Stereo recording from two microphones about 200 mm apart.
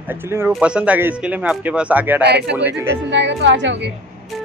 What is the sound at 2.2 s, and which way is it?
Speech, 55° right (ahead or behind).